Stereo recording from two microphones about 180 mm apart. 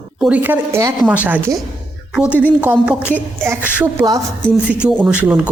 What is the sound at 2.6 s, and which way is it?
A woman's voice, 10° right (ahead or behind).